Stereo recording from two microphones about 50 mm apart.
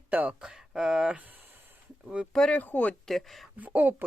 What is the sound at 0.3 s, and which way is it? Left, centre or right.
Speech, centre.